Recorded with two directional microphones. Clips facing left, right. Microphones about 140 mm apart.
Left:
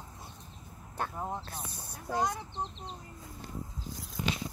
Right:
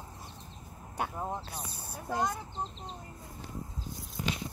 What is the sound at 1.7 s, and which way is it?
Speech, 65° right (ahead or behind).